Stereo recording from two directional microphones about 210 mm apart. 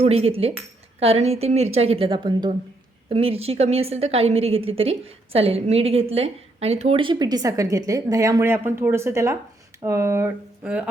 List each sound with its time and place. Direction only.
0.0 s a woman's voice: 30° right (ahead or behind); by 10.8 s 5° right (ahead or behind)